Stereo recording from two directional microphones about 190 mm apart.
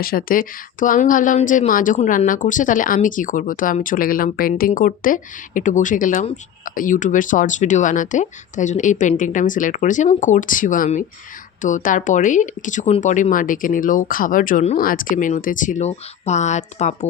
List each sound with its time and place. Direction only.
0.0 s a woman's voice: 50° left (ahead or behind)